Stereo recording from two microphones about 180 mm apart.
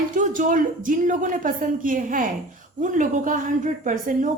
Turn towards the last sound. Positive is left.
turn(degrees=-45)  # may be behind; listen again after turning